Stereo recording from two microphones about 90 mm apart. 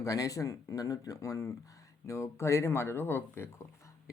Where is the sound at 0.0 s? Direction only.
40° left (ahead or behind).